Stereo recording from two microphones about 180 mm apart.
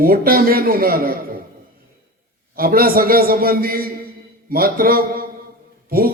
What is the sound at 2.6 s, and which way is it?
A man's voice, 55° right (ahead or behind).